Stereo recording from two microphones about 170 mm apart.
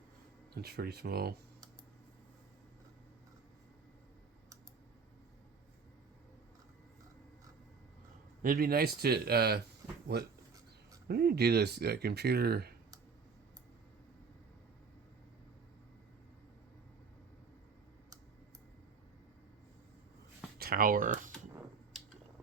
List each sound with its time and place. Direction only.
0.5 s speech: 70° right (ahead or behind)
8.4 s speech: 55° right (ahead or behind)
20.6 s speech: 60° right (ahead or behind)